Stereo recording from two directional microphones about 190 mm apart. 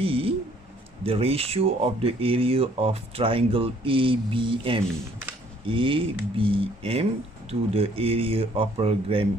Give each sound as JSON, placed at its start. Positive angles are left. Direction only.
{"t": 0.0, "sound": "speech", "side_deg": -30}